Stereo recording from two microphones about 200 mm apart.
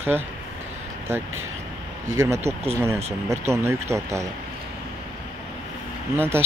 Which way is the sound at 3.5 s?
15° right (ahead or behind).